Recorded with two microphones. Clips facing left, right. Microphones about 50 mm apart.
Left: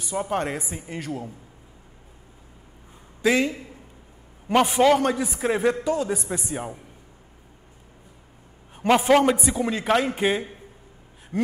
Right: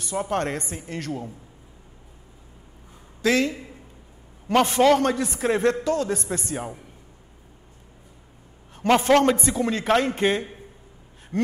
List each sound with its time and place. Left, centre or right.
0.0 s a man's voice: centre
3.2 s a man's voice: centre
4.6 s a man's voice: centre
8.7 s a man's voice: centre
11.3 s gasp: centre